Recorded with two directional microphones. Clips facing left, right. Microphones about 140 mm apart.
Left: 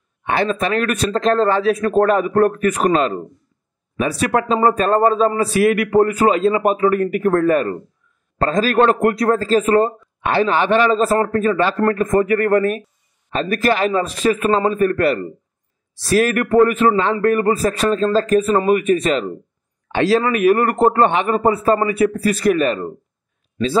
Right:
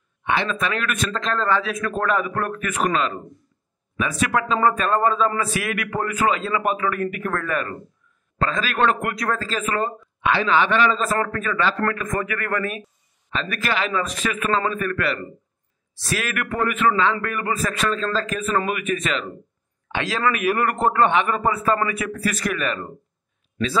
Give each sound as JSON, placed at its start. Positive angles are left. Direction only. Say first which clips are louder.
{"t": 0.2, "sound": "a man's voice", "louder": "left 5 dB", "side_deg": 45}